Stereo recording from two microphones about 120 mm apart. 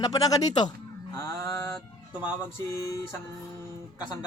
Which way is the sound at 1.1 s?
25° left (ahead or behind).